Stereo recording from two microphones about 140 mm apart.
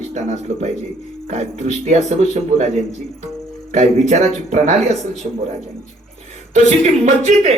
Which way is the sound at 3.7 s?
60° right (ahead or behind).